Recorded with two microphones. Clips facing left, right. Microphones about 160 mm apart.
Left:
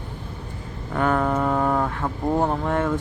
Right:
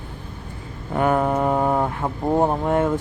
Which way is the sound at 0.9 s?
15° right (ahead or behind).